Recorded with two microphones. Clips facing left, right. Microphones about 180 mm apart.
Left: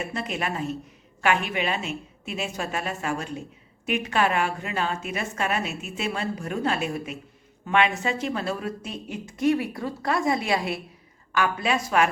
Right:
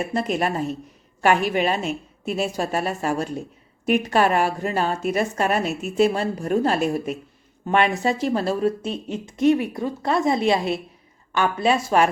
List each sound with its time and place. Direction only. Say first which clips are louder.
0.1 s a woman's voice: right 7 dB; 40° right (ahead or behind)